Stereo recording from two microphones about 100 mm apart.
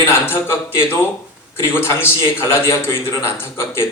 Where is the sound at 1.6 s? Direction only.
25° left (ahead or behind).